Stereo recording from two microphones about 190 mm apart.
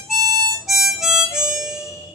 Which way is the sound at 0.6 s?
Centre (ahead or behind).